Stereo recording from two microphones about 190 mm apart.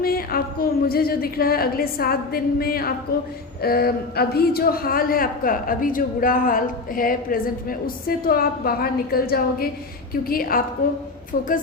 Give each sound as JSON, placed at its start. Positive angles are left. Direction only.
{"t": 0.0, "sound": "a man's voice", "side_deg": 50}